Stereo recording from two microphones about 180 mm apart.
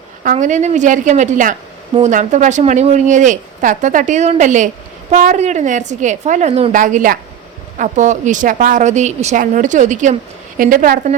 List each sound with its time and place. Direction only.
0.2 s a woman's voice: 45° right (ahead or behind)